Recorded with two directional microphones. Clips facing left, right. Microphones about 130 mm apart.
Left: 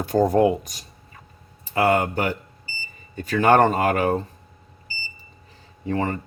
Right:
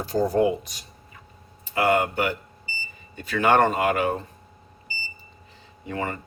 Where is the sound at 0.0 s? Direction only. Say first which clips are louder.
Left 3 dB; 55° left (ahead or behind); by 4.2 s 40° left (ahead or behind).